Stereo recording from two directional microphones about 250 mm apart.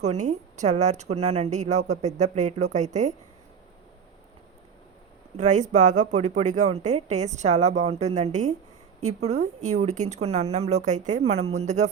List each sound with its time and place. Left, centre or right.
0.0 s speech: right
5.4 s speech: right
11.3 s a woman's voice: right
11.5 s speech: right